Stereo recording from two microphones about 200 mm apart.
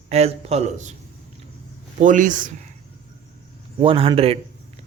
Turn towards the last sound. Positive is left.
turn(degrees=-30)  # may be behind; listen again after turning